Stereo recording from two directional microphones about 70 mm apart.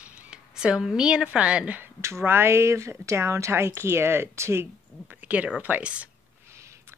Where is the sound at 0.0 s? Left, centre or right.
Centre.